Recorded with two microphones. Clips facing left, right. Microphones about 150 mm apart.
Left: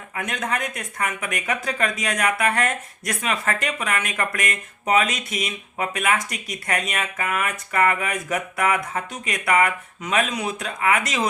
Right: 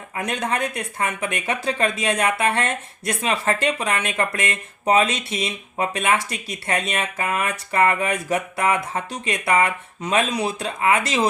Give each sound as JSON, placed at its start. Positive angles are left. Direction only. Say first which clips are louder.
{"t": 0.2, "sound": "speech", "louder": "right 3 dB", "side_deg": -30}